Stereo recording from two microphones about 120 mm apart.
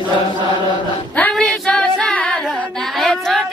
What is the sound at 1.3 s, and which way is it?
Female singing, centre (ahead or behind).